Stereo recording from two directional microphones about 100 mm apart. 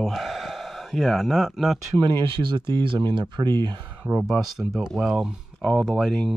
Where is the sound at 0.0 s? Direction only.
Centre (ahead or behind).